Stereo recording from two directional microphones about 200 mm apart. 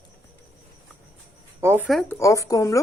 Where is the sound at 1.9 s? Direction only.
Centre (ahead or behind).